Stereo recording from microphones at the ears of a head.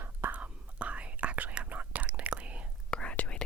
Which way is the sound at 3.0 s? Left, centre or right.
Left.